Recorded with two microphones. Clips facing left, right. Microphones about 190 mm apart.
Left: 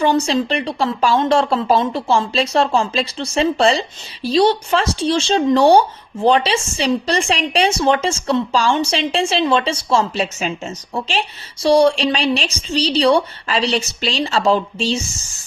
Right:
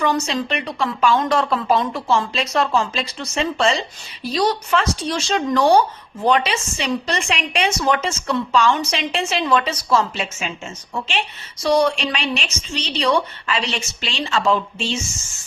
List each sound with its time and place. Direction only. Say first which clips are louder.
0.0 s a woman's voice: left 5 dB; 30° left (ahead or behind)